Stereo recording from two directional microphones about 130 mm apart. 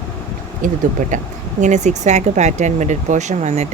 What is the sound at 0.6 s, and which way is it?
Speech, 90° right.